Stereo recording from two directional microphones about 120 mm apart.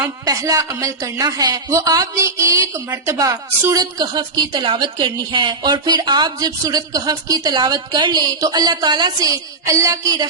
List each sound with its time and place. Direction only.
0.0 s a woman's voice: 25° right (ahead or behind)